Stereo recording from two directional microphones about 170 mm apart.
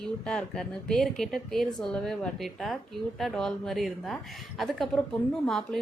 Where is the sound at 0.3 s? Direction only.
5° left (ahead or behind).